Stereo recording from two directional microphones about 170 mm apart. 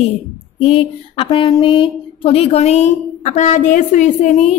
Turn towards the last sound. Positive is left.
turn(degrees=45)  # may be behind; listen again after turning